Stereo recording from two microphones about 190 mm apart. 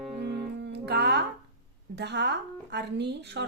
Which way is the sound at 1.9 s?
60° right (ahead or behind).